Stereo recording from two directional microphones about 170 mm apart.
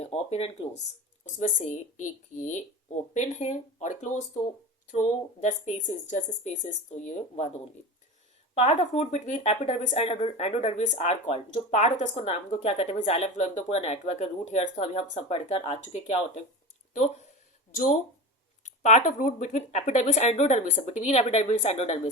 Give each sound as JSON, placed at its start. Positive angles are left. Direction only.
{"t": 0.0, "sound": "speech", "side_deg": 35}
{"t": 8.5, "sound": "speech", "side_deg": 40}
{"t": 18.6, "sound": "speech", "side_deg": 45}